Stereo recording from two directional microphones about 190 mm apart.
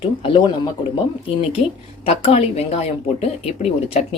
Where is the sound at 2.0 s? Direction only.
30° left (ahead or behind).